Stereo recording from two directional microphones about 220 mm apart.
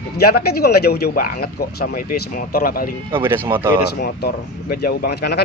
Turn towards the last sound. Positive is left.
turn(degrees=50)  # may be behind; listen again after turning